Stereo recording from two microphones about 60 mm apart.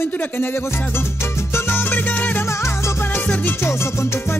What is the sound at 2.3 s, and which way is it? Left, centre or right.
Music, left.